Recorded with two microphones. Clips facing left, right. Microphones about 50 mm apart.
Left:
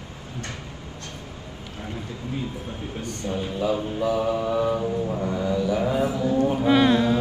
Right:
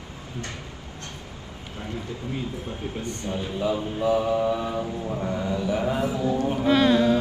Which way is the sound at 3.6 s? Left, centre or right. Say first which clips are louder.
Even; right.